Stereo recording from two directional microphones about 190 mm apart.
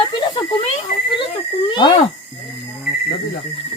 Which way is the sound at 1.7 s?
25° left (ahead or behind).